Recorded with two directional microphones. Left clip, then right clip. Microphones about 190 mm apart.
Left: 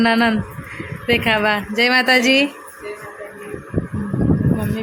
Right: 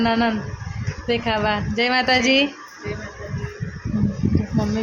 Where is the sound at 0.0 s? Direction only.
10° left (ahead or behind).